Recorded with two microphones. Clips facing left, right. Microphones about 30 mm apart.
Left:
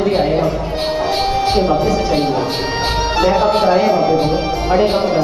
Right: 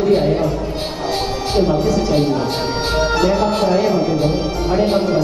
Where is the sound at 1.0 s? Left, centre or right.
Left.